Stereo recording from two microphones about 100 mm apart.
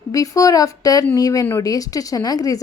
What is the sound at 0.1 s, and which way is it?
A woman's voice, 35° left (ahead or behind).